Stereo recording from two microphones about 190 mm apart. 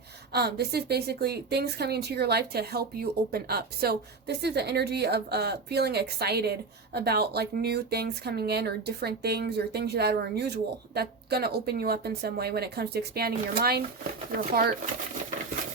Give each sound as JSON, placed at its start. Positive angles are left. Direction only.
{"t": 0.3, "sound": "a woman's voice", "side_deg": -55}